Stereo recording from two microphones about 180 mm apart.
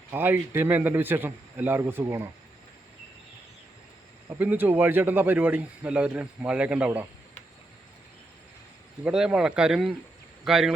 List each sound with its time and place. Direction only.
0.1 s a man's voice: 10° right (ahead or behind)
4.4 s a man's voice: 10° right (ahead or behind)
9.0 s speech: 5° right (ahead or behind)